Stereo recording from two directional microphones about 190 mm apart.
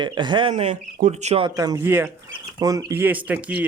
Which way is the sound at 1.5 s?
20° right (ahead or behind).